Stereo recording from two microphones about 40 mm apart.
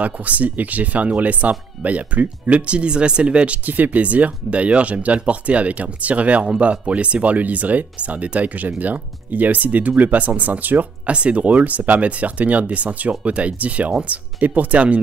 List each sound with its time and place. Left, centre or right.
0.0 s speech: right
3.6 s speech: right
11.1 s speech: right